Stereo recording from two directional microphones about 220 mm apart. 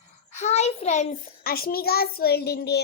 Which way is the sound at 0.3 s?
30° left (ahead or behind).